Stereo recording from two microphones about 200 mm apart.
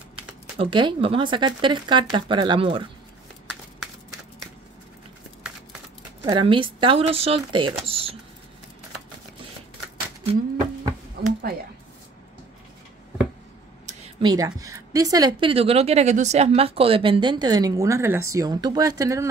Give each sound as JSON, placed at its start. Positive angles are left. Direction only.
{"t": 0.6, "sound": "a woman's voice", "side_deg": -25}
{"t": 6.2, "sound": "a woman's voice", "side_deg": -25}
{"t": 11.2, "sound": "a sound", "side_deg": -55}
{"t": 14.2, "sound": "a woman's voice", "side_deg": -15}